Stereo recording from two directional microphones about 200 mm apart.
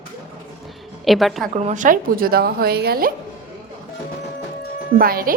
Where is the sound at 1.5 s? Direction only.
35° right (ahead or behind).